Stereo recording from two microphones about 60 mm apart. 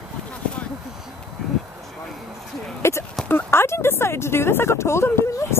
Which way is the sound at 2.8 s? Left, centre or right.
Left.